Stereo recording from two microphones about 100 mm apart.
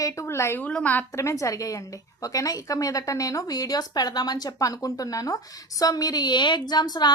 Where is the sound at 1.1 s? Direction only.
30° left (ahead or behind).